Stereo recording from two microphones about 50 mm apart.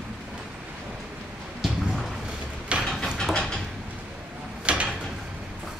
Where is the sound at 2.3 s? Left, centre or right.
Right.